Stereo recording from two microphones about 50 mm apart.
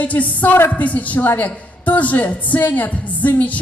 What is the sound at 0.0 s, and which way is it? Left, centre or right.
A woman's voice, left.